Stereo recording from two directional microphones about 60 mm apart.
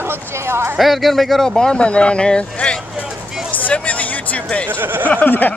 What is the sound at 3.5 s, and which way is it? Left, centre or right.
Music, left.